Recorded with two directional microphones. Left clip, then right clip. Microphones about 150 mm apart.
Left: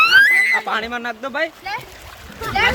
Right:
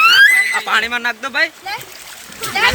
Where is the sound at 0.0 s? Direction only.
35° left (ahead or behind).